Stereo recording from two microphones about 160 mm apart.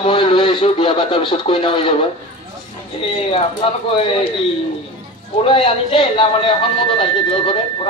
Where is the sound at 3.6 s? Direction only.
35° left (ahead or behind).